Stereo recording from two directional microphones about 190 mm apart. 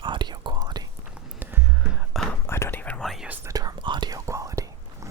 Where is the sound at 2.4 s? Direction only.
10° left (ahead or behind).